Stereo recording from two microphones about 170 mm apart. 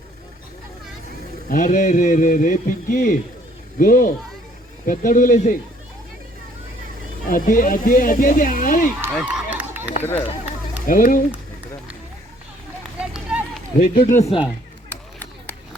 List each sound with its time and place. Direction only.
1.5 s a man's voice: 55° left (ahead or behind)
7.3 s a man's voice: 55° left (ahead or behind)
9.1 s run: 5° right (ahead or behind)
10.8 s speech: 55° left (ahead or behind)
13.0 s run: 5° right (ahead or behind)
13.8 s speech: 60° left (ahead or behind)
14.2 s speech: 35° left (ahead or behind)